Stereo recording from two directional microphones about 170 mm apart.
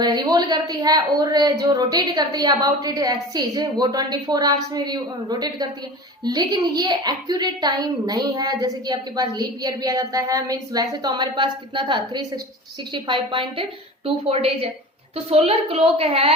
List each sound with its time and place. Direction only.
0.0 s a woman's voice: 25° right (ahead or behind)